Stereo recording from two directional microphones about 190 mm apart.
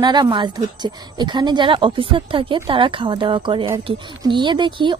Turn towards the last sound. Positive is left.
turn(degrees=-25)  # may be behind; listen again after turning